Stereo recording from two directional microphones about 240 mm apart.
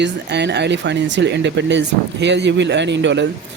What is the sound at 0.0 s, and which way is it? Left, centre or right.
Speech, right.